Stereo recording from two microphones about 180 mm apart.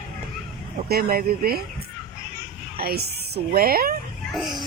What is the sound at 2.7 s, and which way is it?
Speech, 60° right (ahead or behind).